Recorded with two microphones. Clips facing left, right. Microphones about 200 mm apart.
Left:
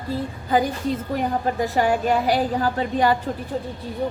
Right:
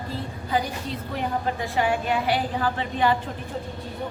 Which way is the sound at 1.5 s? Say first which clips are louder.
Left 5 dB; 40° left (ahead or behind).